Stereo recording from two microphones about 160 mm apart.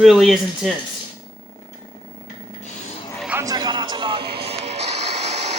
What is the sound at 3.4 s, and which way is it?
Music, 25° right (ahead or behind).